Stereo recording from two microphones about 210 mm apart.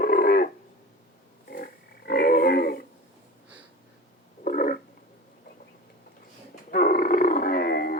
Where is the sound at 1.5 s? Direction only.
45° left (ahead or behind).